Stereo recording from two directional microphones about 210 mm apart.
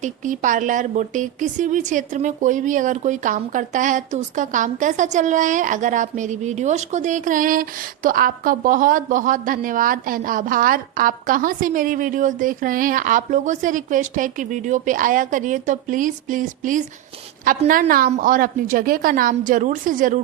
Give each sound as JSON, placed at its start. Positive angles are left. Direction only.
{"t": 0.0, "sound": "a woman's voice", "side_deg": -35}